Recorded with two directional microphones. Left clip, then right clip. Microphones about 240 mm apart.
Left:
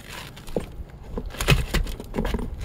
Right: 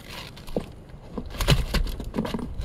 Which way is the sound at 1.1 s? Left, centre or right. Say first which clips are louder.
Left 2 dB; left.